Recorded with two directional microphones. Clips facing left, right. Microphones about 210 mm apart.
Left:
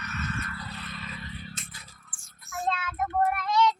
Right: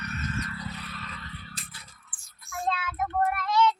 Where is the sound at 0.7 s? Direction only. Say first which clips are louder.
Left 1 dB; 5° right (ahead or behind).